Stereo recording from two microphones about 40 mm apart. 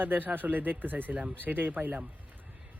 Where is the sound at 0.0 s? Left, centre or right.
Right.